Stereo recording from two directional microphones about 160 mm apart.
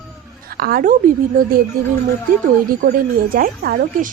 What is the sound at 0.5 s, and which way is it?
Speech, 70° right (ahead or behind).